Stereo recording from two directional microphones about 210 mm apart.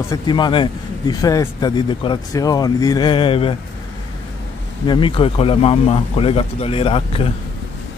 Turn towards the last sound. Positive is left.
turn(degrees=25)  # may be behind; listen again after turning